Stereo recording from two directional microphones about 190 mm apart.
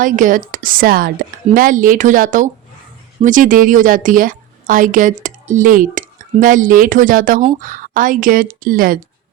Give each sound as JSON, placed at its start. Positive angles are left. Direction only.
{"t": 0.0, "sound": "a woman's voice", "side_deg": -45}